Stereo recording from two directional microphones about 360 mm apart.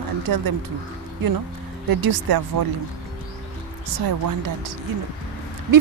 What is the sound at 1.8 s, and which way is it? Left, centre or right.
Speech, right.